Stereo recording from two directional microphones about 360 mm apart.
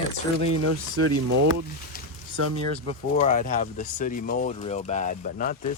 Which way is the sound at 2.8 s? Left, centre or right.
Centre.